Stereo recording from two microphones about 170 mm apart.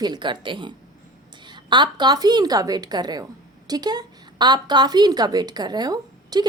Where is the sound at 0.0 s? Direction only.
25° right (ahead or behind).